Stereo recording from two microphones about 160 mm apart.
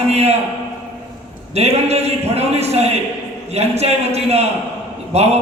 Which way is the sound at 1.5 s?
40° right (ahead or behind).